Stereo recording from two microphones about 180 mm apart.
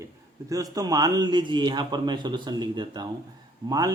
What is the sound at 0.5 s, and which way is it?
A man's voice, 20° right (ahead or behind).